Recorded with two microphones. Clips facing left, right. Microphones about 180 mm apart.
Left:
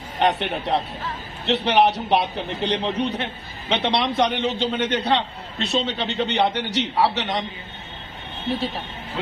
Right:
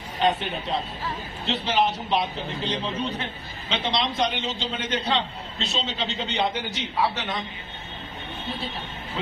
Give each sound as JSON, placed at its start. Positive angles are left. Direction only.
{"t": 0.2, "sound": "a man's voice", "side_deg": 75}